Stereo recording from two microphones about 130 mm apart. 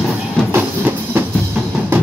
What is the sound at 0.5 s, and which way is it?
Music, 15° right (ahead or behind).